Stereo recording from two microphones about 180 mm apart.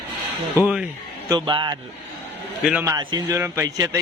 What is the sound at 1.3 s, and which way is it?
Speech, 25° right (ahead or behind).